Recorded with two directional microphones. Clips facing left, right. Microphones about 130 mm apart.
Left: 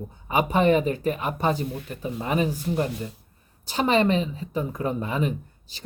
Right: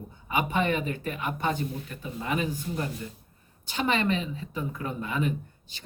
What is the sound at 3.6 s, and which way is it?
A woman's voice, 35° left (ahead or behind).